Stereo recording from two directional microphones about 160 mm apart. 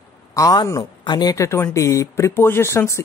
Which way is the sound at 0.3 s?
20° left (ahead or behind).